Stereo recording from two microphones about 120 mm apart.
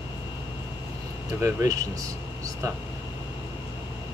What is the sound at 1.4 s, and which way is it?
Speech, 30° right (ahead or behind).